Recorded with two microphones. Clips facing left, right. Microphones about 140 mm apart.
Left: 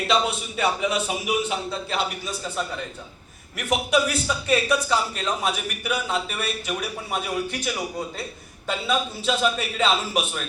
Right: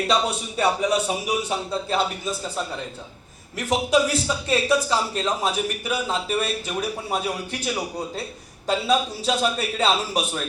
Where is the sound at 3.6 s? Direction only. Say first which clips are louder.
Right 2 dB; 30° right (ahead or behind).